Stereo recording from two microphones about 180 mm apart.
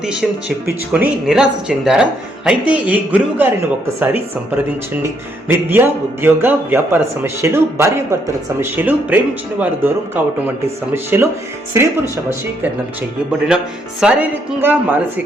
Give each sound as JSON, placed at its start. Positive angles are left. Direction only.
{"t": 0.0, "sound": "speech", "side_deg": -5}
{"t": 14.0, "sound": "speech", "side_deg": -10}